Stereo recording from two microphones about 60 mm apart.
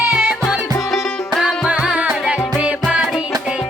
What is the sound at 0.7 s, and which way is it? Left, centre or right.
Music, centre.